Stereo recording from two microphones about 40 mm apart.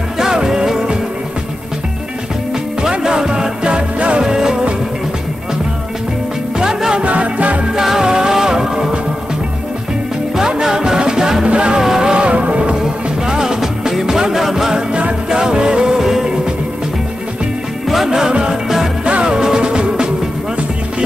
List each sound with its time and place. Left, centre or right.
0.2 s music: centre
2.8 s music: centre
6.6 s music: centre
7.0 s music: right
7.7 s music: centre
10.5 s music: centre
11.4 s music: right
11.8 s music: centre
12.1 s vehicle: right
13.3 s music: centre
17.8 s music: centre
18.3 s music: right